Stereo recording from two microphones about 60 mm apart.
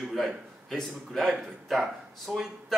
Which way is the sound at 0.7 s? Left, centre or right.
Centre.